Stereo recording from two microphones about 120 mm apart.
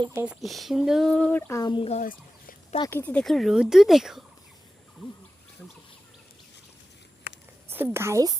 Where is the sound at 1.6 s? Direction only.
40° left (ahead or behind).